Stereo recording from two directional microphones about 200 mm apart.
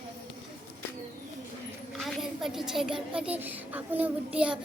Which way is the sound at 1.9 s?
Centre (ahead or behind).